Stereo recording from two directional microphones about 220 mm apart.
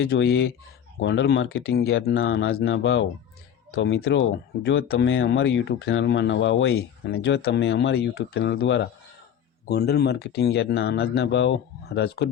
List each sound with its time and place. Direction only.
0.0 s speech: 50° left (ahead or behind)
2.1 s speech: 65° left (ahead or behind)
2.5 s speech: 50° left (ahead or behind)
4.9 s speech: 60° left (ahead or behind)